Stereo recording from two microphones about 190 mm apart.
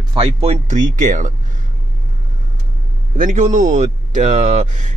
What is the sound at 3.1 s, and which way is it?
A man's voice, 40° right (ahead or behind).